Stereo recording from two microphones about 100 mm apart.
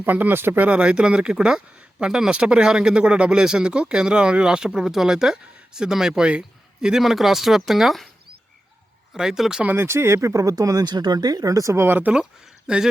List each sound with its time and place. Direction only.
0.0 s speech: 20° right (ahead or behind); by 8.0 s centre (ahead or behind)
9.1 s speech: 5° right (ahead or behind)
9.6 s speech: 25° right (ahead or behind); by 12.9 s 5° right (ahead or behind)